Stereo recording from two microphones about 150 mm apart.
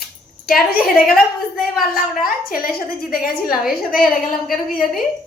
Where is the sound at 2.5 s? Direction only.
75° left (ahead or behind).